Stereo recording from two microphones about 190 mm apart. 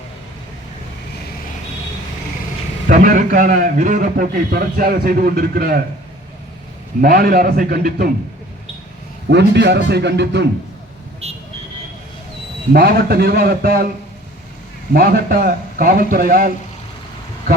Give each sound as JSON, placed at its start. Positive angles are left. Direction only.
{"t": 2.8, "sound": "a man's voice", "side_deg": -45}
{"t": 7.0, "sound": "a man's voice", "side_deg": -50}
{"t": 9.3, "sound": "a man's voice", "side_deg": -65}
{"t": 12.7, "sound": "a man's voice", "side_deg": -55}
{"t": 14.9, "sound": "a man's voice", "side_deg": -55}